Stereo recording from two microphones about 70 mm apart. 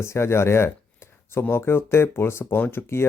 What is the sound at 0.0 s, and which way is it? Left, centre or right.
Speech, left.